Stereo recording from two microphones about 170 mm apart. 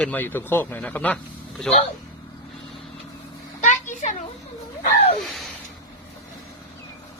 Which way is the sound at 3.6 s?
45° left (ahead or behind).